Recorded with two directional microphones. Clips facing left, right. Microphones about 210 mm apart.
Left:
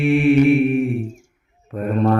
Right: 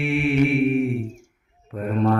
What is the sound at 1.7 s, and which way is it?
Mantra, 45° left (ahead or behind).